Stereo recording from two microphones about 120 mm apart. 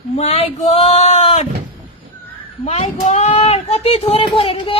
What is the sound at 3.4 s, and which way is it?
Speech, 55° left (ahead or behind).